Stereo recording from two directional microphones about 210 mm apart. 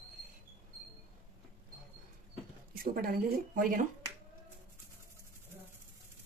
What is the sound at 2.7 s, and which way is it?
Speech, 45° right (ahead or behind).